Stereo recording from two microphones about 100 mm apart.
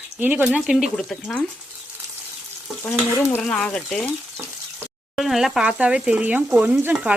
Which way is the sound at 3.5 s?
10° left (ahead or behind).